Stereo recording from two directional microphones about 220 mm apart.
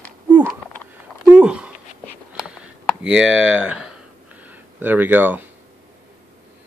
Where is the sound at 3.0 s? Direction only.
60° right (ahead or behind).